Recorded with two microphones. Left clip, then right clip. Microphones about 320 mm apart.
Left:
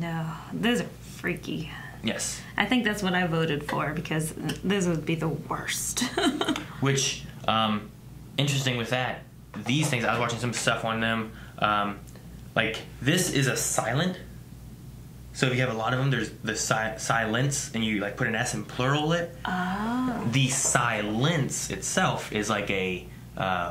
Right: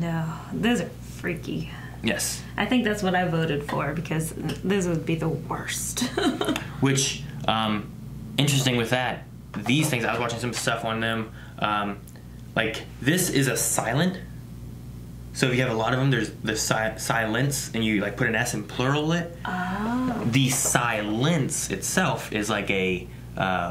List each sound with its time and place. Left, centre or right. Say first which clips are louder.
0.0 s a sound: right 3 dB; centre
2.0 s speech: right 4 dB; left
2.5 s speech: right 1 dB; centre
6.5 s speech: right 2 dB; left
15.3 s speech: right 3 dB; left
20.2 s speech: right 3 dB; left